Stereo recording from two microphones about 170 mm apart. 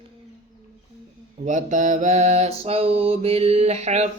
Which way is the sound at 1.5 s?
45° right (ahead or behind).